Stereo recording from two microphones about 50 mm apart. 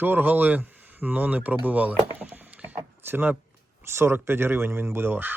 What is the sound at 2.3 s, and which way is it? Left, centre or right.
Vehicle, right.